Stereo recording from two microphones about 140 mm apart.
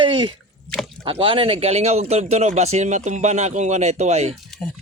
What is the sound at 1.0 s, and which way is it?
Speech, 40° right (ahead or behind).